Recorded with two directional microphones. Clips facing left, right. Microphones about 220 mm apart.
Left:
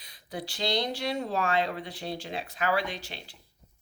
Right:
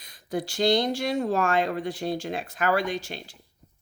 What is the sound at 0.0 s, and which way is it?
Speech, 45° right (ahead or behind).